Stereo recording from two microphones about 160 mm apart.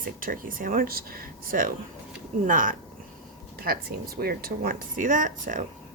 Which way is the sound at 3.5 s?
70° right (ahead or behind).